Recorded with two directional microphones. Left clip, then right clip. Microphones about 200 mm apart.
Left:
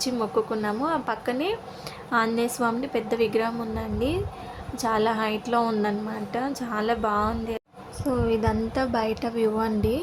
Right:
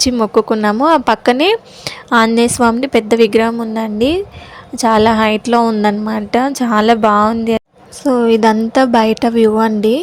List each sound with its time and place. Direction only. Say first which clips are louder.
0.0 s a woman's voice: right 13 dB; 40° right (ahead or behind)
6.1 s a woman's voice: right 14 dB; 45° right (ahead or behind)